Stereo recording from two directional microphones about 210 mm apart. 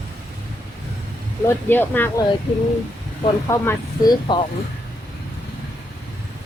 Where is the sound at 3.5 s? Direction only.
15° left (ahead or behind).